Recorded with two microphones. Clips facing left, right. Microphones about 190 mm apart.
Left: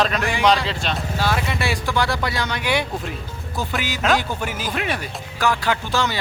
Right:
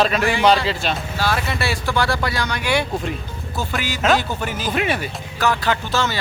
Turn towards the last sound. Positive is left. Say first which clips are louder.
# right 1 dB
turn(degrees=15)  # may be behind; listen again after turning